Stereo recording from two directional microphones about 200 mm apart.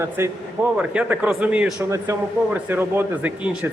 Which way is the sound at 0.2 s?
10° right (ahead or behind).